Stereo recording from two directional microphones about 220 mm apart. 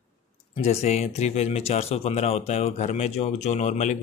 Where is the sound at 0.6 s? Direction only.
30° left (ahead or behind).